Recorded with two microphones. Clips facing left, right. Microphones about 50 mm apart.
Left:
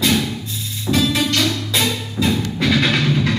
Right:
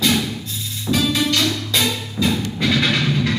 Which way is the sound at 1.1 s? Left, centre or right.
Centre.